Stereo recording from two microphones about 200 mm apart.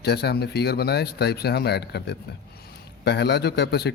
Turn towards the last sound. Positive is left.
turn(degrees=55)  # may be behind; listen again after turning